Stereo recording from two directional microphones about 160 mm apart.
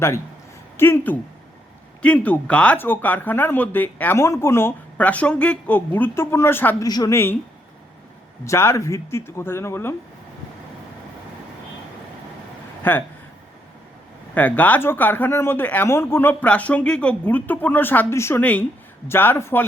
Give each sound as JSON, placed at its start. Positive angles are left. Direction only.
{"t": 0.8, "sound": "speech", "side_deg": 15}
{"t": 6.8, "sound": "a woman's voice", "side_deg": 25}
{"t": 8.4, "sound": "speech", "side_deg": 15}
{"t": 12.8, "sound": "speech", "side_deg": 10}
{"t": 14.3, "sound": "speech", "side_deg": 10}